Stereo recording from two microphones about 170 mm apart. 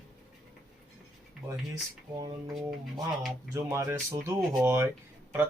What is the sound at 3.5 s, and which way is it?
Speech, 15° right (ahead or behind).